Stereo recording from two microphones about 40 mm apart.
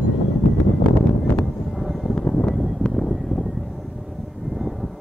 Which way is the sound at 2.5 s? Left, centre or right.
Centre.